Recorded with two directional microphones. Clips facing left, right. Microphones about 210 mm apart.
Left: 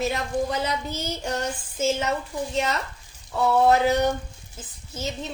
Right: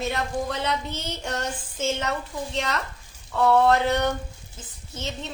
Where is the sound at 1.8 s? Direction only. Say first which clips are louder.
Left 3 dB; 5° left (ahead or behind).